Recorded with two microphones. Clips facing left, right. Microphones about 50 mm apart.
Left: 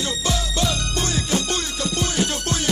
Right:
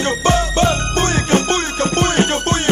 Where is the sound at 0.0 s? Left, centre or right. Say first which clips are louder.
Right 9 dB; right.